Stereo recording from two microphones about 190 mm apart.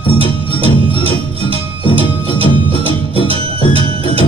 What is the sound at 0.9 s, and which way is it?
Music, 30° right (ahead or behind).